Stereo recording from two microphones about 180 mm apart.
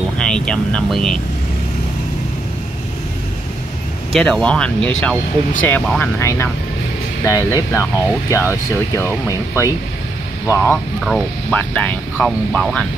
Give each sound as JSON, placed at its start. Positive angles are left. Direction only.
{"t": 0.2, "sound": "speech", "side_deg": 5}
{"t": 4.1, "sound": "speech", "side_deg": 5}